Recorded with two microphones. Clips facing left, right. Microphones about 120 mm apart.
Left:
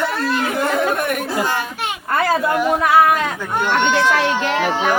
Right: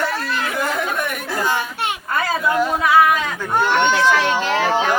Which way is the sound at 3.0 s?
50° left (ahead or behind).